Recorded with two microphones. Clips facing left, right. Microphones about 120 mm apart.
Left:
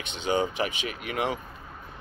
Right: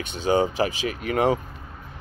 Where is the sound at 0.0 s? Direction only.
40° right (ahead or behind).